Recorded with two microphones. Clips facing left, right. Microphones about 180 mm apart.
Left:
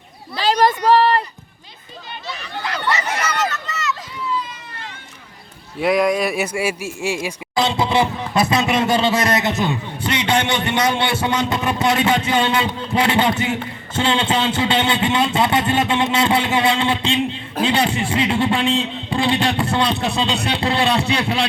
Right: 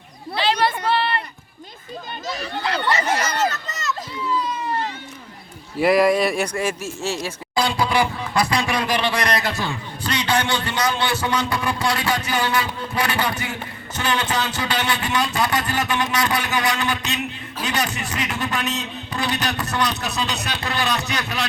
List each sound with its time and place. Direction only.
0.3 s a sound: 40° left (ahead or behind)
2.2 s speech: 40° right (ahead or behind)
5.8 s speech: centre (ahead or behind); by 21.4 s 30° left (ahead or behind)